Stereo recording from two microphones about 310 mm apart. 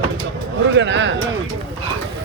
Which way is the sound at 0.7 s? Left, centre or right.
Right.